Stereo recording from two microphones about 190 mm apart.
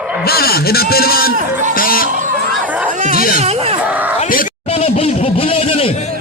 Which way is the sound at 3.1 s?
50° left (ahead or behind).